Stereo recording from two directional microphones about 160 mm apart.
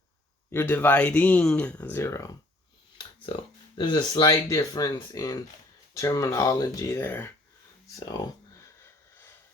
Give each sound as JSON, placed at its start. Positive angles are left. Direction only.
{"t": 0.5, "sound": "speech", "side_deg": 10}
{"t": 3.8, "sound": "speech", "side_deg": 30}